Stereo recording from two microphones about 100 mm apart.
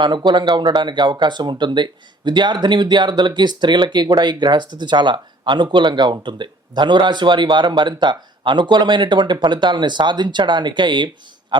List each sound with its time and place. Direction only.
0.0 s speech: 50° right (ahead or behind)